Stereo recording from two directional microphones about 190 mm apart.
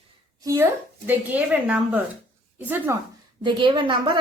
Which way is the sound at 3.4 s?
25° right (ahead or behind).